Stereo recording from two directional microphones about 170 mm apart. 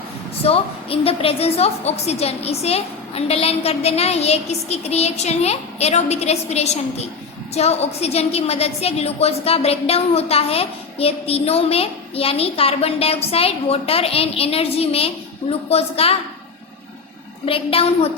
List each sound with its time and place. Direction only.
0.4 s a woman's voice: 35° left (ahead or behind)
17.4 s a woman's voice: 35° left (ahead or behind)